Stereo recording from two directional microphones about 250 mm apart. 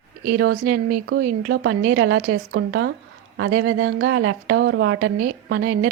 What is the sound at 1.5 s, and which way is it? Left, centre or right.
A woman's voice, right.